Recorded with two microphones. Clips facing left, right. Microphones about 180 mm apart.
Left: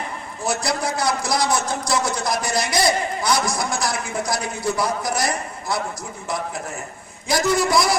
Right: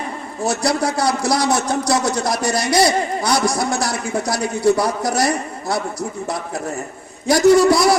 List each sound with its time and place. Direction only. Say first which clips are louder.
0.6 s a man's voice: right 6 dB; 65° right (ahead or behind)